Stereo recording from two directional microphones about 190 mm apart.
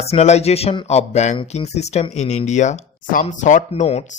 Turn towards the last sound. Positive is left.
turn(degrees=35)  # may be behind; listen again after turning